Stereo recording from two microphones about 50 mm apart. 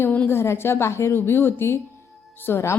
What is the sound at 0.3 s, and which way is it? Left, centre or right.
A woman's voice, left.